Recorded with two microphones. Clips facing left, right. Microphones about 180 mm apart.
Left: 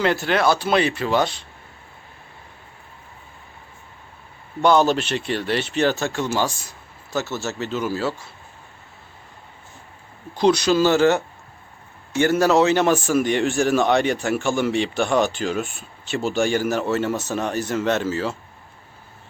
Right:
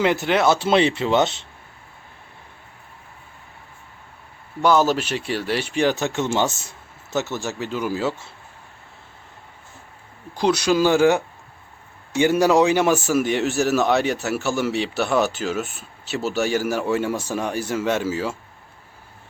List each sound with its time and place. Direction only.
0.0 s speech: 20° right (ahead or behind)
4.6 s speech: 5° right (ahead or behind)
10.3 s speech: 10° right (ahead or behind)